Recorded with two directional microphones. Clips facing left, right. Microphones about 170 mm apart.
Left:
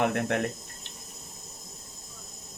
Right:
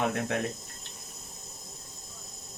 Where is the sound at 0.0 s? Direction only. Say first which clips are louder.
Left 3 dB; 65° left (ahead or behind).